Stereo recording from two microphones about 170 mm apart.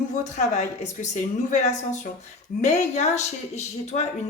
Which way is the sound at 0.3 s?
45° left (ahead or behind).